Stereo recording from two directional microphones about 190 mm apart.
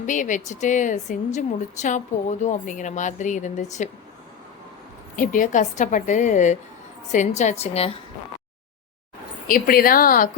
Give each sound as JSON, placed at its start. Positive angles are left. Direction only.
{"t": 0.0, "sound": "a woman's voice", "side_deg": 40}
{"t": 5.1, "sound": "a woman's voice", "side_deg": 45}
{"t": 9.5, "sound": "speech", "side_deg": 50}